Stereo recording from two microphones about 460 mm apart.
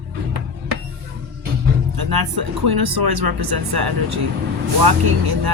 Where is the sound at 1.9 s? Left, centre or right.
Right.